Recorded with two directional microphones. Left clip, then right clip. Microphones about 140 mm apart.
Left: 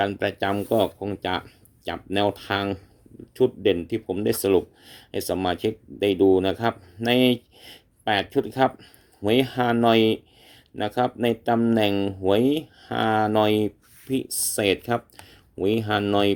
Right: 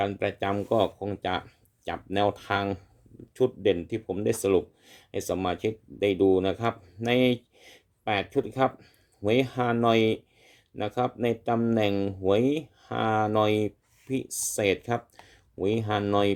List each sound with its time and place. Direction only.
0.0 s speech: 15° left (ahead or behind)